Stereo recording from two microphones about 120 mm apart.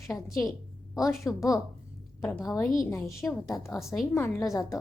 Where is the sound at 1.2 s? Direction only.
25° left (ahead or behind).